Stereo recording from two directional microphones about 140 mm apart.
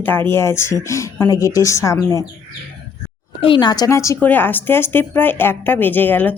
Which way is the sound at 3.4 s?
35° left (ahead or behind).